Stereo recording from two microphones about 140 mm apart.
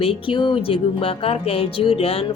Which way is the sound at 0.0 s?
40° left (ahead or behind).